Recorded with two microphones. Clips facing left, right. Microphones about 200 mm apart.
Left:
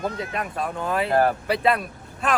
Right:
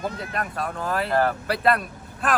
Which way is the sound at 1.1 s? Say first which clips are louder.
Left 2 dB; 25° left (ahead or behind).